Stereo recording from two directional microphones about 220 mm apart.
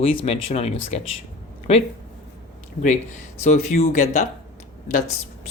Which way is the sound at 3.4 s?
30° left (ahead or behind).